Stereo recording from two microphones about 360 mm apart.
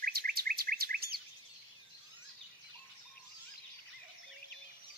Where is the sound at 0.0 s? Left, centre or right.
Right.